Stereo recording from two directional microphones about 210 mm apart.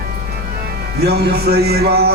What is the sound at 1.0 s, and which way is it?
Music, 50° right (ahead or behind).